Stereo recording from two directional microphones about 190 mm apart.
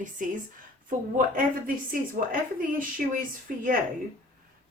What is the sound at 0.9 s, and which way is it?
A woman's voice, 45° right (ahead or behind).